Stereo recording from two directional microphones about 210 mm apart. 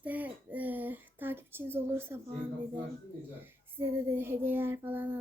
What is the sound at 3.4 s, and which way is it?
A child's voice, 10° right (ahead or behind).